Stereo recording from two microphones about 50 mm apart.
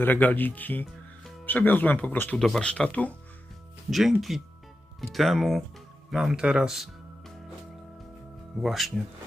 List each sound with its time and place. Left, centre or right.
0.0 s speech: left
2.6 s speech: left
3.8 s speech: centre
6.3 s speech: centre
8.6 s speech: centre